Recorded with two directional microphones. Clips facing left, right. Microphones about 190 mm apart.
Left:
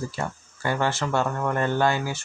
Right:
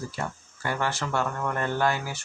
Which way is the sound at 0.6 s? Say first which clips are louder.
Left 4 dB; 25° left (ahead or behind).